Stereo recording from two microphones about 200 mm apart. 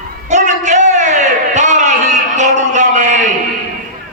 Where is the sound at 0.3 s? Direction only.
35° right (ahead or behind).